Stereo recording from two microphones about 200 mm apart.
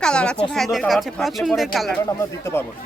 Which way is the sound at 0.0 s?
5° left (ahead or behind).